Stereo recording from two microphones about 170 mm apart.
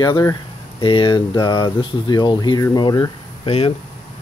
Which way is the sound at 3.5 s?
35° left (ahead or behind).